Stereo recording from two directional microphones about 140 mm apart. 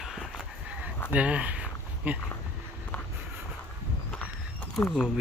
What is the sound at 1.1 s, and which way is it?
Speech, 10° right (ahead or behind).